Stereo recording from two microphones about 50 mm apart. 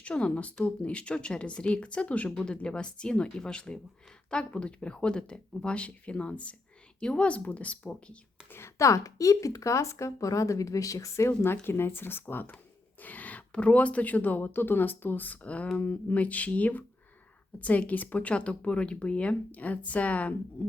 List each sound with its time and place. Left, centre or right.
0.0 s speech: left
8.8 s speech: left
11.6 s speech: left
13.0 s speech: left
15.8 s speech: left